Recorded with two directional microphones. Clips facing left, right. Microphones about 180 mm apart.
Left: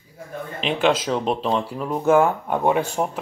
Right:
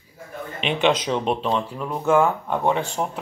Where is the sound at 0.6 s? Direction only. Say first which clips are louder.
Even; centre (ahead or behind).